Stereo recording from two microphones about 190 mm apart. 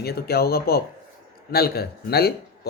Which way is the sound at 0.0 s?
55° left (ahead or behind).